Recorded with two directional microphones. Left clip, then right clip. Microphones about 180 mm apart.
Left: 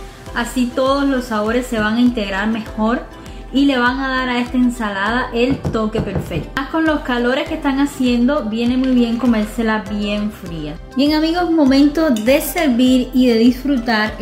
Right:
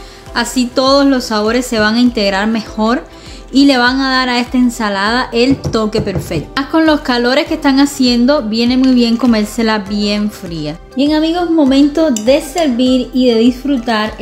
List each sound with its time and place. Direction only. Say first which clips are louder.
0.3 s a woman's voice: right 5 dB; 40° right (ahead or behind)
11.1 s speech: right 3 dB; 20° right (ahead or behind)